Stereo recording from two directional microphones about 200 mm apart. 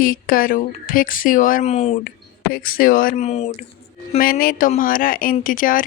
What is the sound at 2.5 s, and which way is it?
Speech, 45° left (ahead or behind).